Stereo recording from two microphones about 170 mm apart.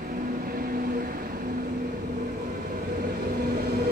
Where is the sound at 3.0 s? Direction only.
65° right (ahead or behind).